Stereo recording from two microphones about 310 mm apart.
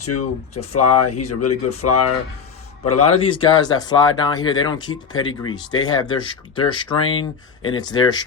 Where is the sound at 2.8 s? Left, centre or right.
Centre.